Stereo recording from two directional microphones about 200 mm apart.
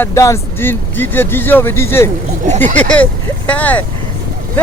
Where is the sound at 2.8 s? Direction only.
5° left (ahead or behind).